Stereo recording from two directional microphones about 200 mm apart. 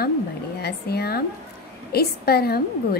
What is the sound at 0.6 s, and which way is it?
A woman's voice, 55° left (ahead or behind).